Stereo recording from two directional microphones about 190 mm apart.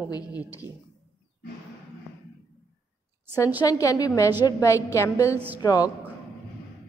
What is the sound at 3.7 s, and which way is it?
A woman's voice, 15° left (ahead or behind).